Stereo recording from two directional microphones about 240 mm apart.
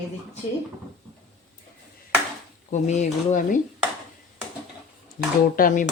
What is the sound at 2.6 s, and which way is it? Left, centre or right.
Speech, left.